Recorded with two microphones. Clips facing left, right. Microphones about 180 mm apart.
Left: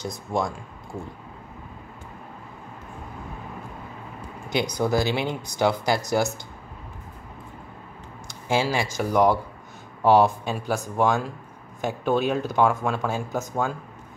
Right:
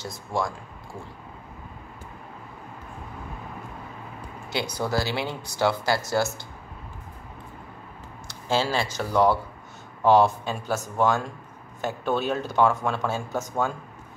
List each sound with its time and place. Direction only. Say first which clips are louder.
0.0 s speech: left 2 dB; 20° left (ahead or behind)
4.5 s speech: left 4 dB; 15° left (ahead or behind)
8.3 s speech: left 1 dB; 15° left (ahead or behind)